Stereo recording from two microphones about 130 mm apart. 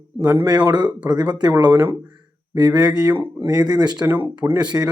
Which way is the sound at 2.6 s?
30° right (ahead or behind).